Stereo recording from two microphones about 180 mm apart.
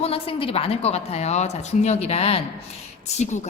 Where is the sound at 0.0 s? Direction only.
30° left (ahead or behind).